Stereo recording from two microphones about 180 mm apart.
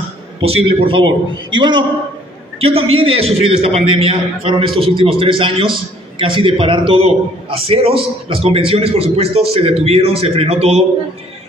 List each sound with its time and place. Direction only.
0.4 s a man's voice: 30° right (ahead or behind)